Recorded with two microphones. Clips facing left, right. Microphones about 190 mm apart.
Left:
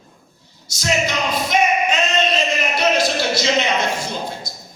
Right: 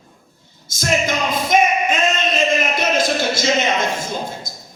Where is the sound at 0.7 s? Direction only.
50° right (ahead or behind).